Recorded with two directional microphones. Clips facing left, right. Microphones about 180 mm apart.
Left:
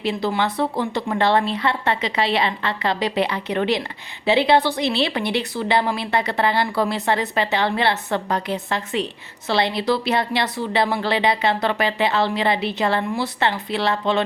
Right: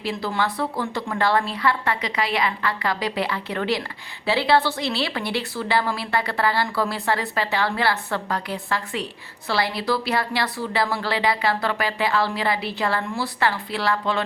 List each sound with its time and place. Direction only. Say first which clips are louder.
0.0 s speech: left 3 dB; 20° left (ahead or behind)